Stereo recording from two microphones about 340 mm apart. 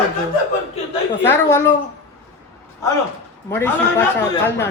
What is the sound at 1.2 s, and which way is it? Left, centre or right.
Speech, centre.